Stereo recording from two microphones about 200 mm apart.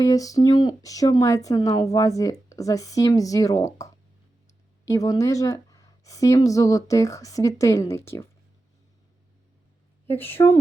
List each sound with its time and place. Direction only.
0.0 s a woman's voice: 15° left (ahead or behind)
10.1 s a woman's voice: 10° left (ahead or behind)